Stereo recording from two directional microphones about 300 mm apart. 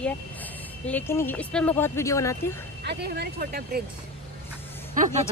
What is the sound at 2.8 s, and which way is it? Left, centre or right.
Speech, right.